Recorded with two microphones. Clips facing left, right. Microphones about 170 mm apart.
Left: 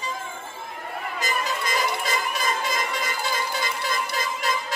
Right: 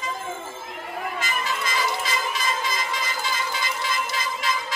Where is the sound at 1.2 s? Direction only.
40° left (ahead or behind).